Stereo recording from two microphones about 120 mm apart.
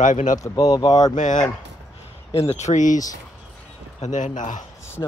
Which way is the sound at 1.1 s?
90° left.